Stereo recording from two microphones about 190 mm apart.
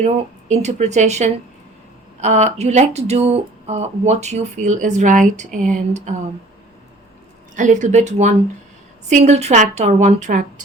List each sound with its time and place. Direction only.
0.0 s speech: 35° right (ahead or behind)
7.5 s speech: 40° right (ahead or behind)